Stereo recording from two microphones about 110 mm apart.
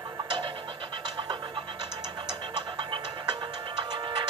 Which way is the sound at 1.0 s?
40° right (ahead or behind).